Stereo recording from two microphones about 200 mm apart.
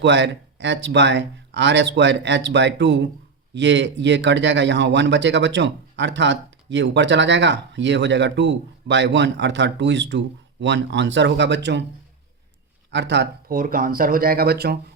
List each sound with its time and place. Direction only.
0.0 s speech: 60° right (ahead or behind)
12.9 s speech: 60° right (ahead or behind)